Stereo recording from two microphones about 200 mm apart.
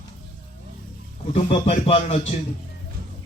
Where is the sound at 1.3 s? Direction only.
30° left (ahead or behind).